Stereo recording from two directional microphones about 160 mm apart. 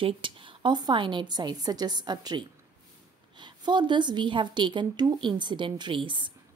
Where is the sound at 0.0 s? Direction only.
30° right (ahead or behind).